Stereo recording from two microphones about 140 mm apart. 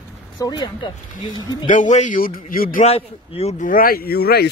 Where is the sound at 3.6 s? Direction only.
90° left.